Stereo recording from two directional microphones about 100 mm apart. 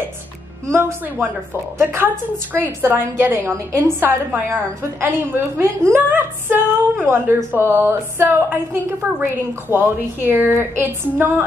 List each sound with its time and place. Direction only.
0.7 s a woman's voice: 30° right (ahead or behind)